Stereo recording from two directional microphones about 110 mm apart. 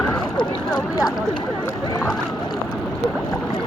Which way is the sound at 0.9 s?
35° left (ahead or behind).